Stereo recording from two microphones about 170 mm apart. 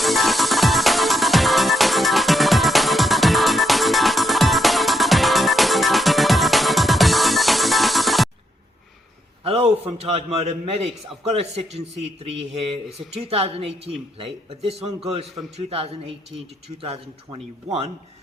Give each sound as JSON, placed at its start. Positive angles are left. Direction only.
{"t": 0.0, "sound": "music", "side_deg": 0}
{"t": 9.4, "sound": "a man's voice", "side_deg": -35}